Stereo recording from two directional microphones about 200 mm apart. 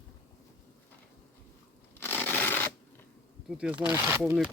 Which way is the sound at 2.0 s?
10° left (ahead or behind).